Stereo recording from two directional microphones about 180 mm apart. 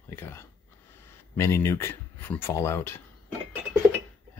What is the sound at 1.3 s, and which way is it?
Speech, 15° left (ahead or behind).